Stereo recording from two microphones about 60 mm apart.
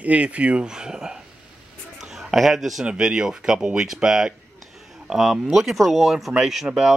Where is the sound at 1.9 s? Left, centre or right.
Centre.